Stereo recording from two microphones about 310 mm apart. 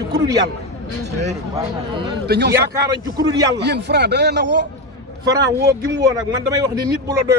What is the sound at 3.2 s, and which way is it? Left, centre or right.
Speech, centre.